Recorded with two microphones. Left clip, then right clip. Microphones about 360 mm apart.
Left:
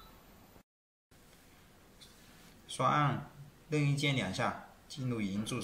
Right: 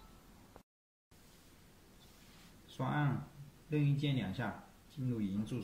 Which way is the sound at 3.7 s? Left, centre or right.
Left.